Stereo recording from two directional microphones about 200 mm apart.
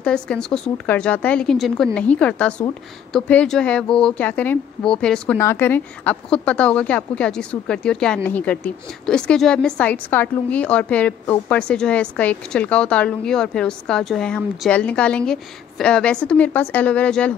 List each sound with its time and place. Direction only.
0.0 s a woman's voice: 5° left (ahead or behind)